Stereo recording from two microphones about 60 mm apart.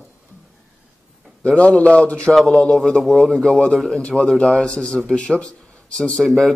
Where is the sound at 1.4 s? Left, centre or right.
Centre.